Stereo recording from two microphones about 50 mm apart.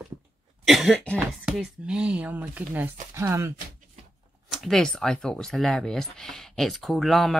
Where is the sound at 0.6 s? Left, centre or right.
Centre.